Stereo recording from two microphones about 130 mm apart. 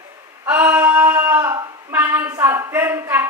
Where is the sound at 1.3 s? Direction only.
20° right (ahead or behind).